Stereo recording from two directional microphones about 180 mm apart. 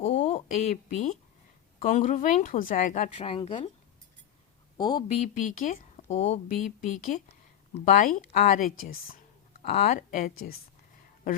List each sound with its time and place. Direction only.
0.0 s a sound: 35° left (ahead or behind)
1.8 s speech: 45° left (ahead or behind)
4.8 s speech: 25° left (ahead or behind)
5.3 s speech: 45° left (ahead or behind)
9.9 s speech: 45° left (ahead or behind)